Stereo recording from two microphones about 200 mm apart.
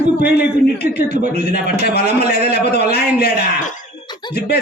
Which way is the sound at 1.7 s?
50° left (ahead or behind).